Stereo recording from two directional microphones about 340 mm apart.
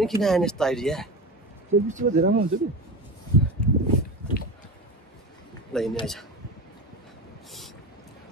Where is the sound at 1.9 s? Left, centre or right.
Right.